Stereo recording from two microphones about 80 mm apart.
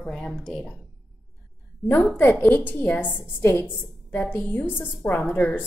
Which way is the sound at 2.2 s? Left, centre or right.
Left.